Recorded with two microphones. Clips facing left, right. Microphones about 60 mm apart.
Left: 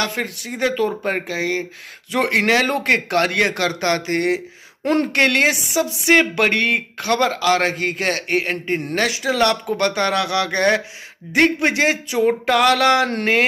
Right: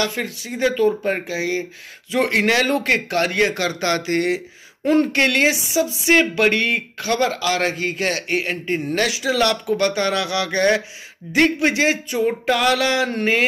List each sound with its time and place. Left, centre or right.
0.0 s speech: left
2.2 s speech: left